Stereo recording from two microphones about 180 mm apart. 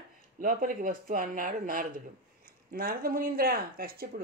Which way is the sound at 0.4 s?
50° right (ahead or behind).